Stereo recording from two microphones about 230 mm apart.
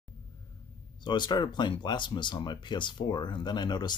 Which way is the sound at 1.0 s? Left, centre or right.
Centre.